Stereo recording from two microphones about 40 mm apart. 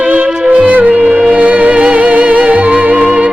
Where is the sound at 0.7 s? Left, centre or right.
Right.